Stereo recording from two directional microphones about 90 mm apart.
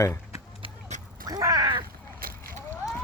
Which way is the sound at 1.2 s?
45° right (ahead or behind).